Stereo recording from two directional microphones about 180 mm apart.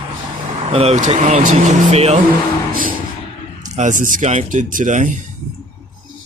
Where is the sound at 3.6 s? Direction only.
40° right (ahead or behind).